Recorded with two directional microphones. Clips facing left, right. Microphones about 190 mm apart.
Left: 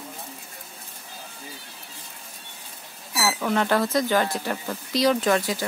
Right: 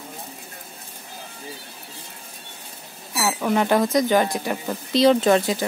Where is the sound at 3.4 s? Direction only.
15° right (ahead or behind).